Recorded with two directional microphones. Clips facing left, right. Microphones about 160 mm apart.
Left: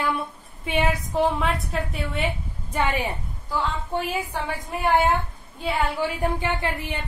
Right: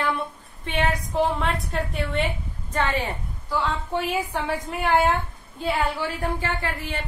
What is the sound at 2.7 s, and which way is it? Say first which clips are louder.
Speech: even; 10° left (ahead or behind).